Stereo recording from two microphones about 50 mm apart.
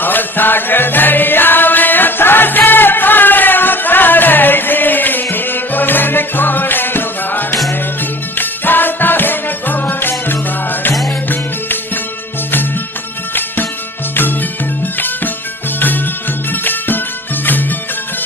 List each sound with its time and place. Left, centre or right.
0.0 s music: left
14.9 s music: left
16.5 s music: left